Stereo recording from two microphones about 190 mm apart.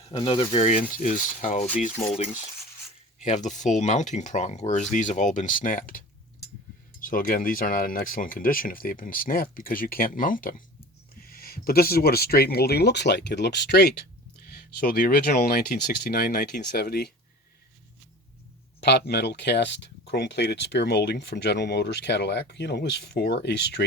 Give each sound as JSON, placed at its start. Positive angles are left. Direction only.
{"t": 0.0, "sound": "speech", "side_deg": 25}
{"t": 3.2, "sound": "speech", "side_deg": 40}
{"t": 18.8, "sound": "speech", "side_deg": 60}